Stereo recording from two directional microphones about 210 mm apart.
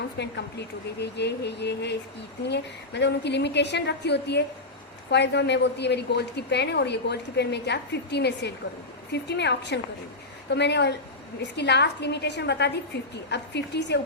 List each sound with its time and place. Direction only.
0.2 s a woman's voice: 55° left (ahead or behind)